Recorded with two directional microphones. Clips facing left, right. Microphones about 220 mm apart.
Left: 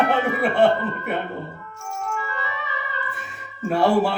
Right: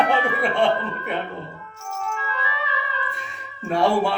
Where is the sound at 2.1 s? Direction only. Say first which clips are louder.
Even; 45° left (ahead or behind).